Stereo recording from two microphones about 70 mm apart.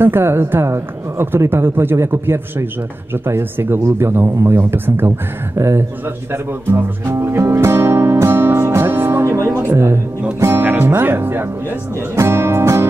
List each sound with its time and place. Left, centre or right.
0.0 s a woman's voice: right
5.6 s a woman's voice: right
6.3 s music: right
9.6 s speech: right
10.6 s speech: right
12.2 s music: right